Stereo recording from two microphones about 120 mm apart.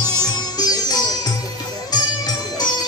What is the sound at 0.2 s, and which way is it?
Music, 35° left (ahead or behind).